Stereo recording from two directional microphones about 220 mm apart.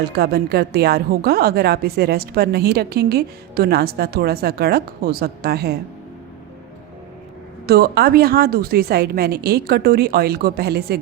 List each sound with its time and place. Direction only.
0.2 s a woman's voice: 45° right (ahead or behind)
7.7 s a woman's voice: 45° right (ahead or behind)